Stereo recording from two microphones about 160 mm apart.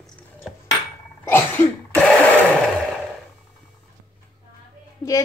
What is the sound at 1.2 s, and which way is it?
Cough, 15° left (ahead or behind).